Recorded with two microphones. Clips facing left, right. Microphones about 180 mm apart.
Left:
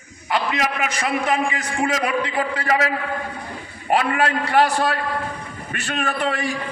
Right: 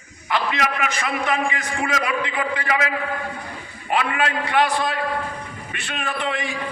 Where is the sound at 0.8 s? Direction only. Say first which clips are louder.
Left 2 dB; 40° left (ahead or behind).